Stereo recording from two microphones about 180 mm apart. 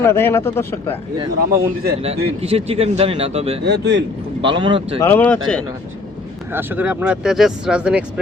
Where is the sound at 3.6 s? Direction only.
65° right (ahead or behind).